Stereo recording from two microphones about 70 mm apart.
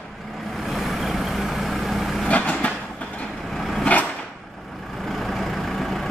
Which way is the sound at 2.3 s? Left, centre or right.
Centre.